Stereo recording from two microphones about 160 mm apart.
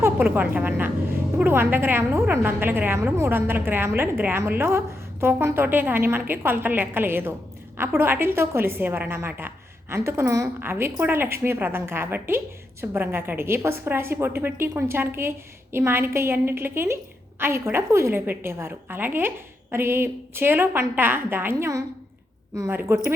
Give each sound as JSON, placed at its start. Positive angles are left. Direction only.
{"t": 0.0, "sound": "a woman's voice", "side_deg": -10}